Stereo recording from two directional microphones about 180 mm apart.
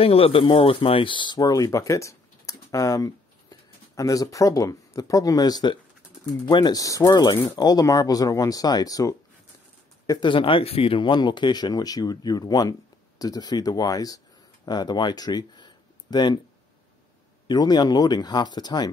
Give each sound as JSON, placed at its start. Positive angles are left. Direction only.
{"t": 0.0, "sound": "speech", "side_deg": 30}
{"t": 17.5, "sound": "speech", "side_deg": 25}